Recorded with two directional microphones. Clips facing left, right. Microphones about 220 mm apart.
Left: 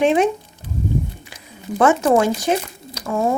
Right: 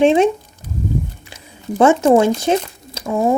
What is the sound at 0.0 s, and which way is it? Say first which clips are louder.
Speech: right 4 dB; 25° right (ahead or behind).